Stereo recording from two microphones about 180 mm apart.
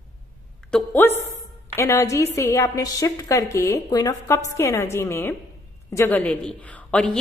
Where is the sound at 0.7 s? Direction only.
10° left (ahead or behind).